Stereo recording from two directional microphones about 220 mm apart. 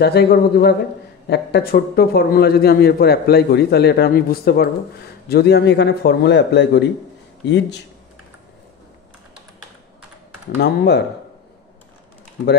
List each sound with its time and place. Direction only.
0.0 s a man's voice: 45° left (ahead or behind)
10.6 s a man's voice: 50° left (ahead or behind)